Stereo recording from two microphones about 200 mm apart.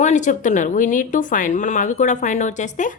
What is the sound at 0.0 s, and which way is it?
Speech, 35° left (ahead or behind).